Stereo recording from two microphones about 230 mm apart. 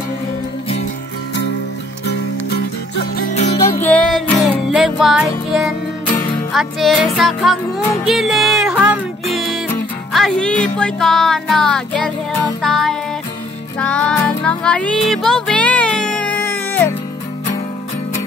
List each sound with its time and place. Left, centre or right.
2.0 s music: left
3.8 s music: centre